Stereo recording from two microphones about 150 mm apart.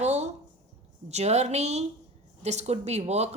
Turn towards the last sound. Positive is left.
turn(degrees=-45)  # may be behind; listen again after turning